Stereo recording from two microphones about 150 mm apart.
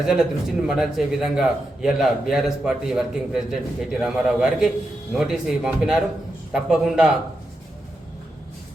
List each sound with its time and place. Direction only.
0.0 s a man's voice: 5° right (ahead or behind)